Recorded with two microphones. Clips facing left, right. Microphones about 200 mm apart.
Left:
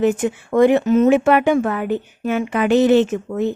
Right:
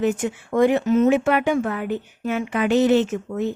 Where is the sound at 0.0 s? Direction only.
65° left (ahead or behind).